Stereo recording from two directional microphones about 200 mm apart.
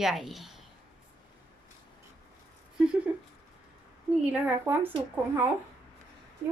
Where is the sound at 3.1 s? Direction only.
10° right (ahead or behind).